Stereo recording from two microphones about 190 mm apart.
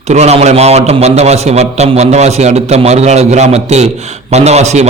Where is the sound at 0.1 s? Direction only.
35° right (ahead or behind).